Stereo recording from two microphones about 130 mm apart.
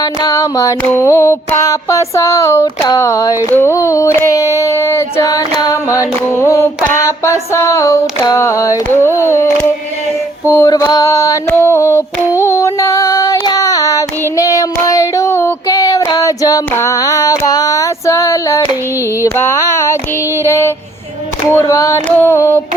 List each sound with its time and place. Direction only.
0.0 s female singing: 30° left (ahead or behind)
10.4 s a sound: 20° left (ahead or behind)
12.4 s child singing: 20° left (ahead or behind)
19.2 s speech: 20° left (ahead or behind)
20.5 s female singing: 20° left (ahead or behind)